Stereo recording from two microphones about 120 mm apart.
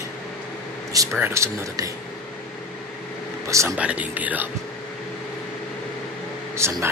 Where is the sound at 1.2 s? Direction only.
20° right (ahead or behind).